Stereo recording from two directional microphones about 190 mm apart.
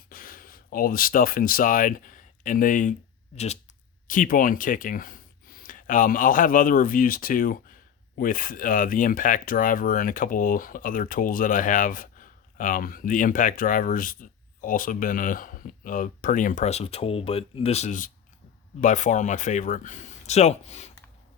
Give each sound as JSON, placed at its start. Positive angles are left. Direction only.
{"t": 0.1, "sound": "speech", "side_deg": 50}